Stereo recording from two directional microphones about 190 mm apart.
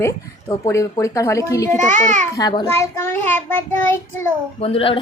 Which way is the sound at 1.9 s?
40° right (ahead or behind).